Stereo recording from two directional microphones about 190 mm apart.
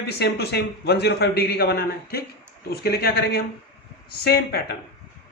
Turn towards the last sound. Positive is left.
turn(degrees=55)  # may be behind; listen again after turning